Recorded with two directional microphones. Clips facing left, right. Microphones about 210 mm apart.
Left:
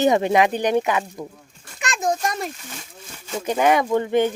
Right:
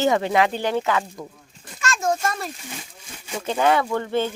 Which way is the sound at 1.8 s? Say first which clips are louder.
Even; 15° left (ahead or behind).